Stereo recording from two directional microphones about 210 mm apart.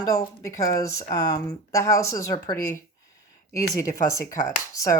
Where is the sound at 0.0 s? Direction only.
15° left (ahead or behind).